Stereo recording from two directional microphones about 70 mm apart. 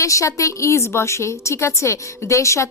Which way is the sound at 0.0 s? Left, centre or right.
Left.